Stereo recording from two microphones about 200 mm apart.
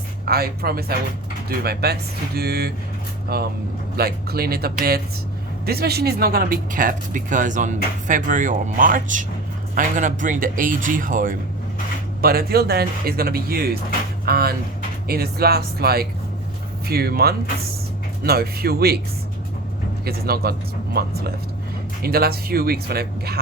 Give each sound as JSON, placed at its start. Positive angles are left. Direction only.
{"t": 0.3, "sound": "speech", "side_deg": -50}
{"t": 20.1, "sound": "speech", "side_deg": -50}